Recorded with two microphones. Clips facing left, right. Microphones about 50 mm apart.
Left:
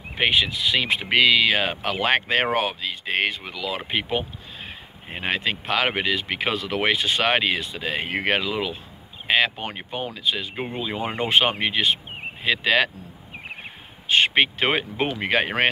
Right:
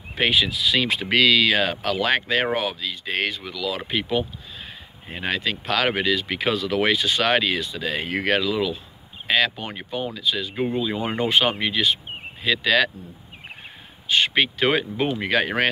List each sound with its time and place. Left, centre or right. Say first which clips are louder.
0.2 s speech: even; left
14.0 s speech: left 1 dB; left